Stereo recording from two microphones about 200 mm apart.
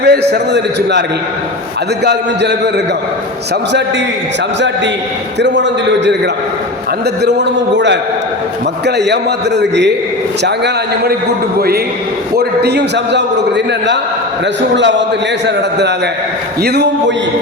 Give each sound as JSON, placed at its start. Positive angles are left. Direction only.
{"t": 0.0, "sound": "a man's voice", "side_deg": -55}
{"t": 2.0, "sound": "a man's voice", "side_deg": -60}
{"t": 5.4, "sound": "a man's voice", "side_deg": -60}
{"t": 7.2, "sound": "a man's voice", "side_deg": -60}
{"t": 9.6, "sound": "a man's voice", "side_deg": -60}
{"t": 12.4, "sound": "a man's voice", "side_deg": -55}
{"t": 14.8, "sound": "a man's voice", "side_deg": -60}